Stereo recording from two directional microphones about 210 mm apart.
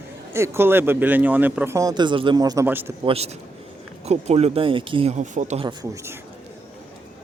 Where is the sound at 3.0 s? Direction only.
30° right (ahead or behind).